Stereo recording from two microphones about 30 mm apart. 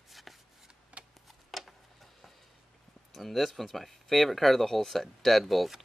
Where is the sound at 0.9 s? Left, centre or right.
Right.